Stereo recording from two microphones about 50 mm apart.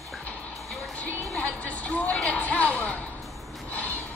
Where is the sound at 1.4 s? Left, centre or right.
Left.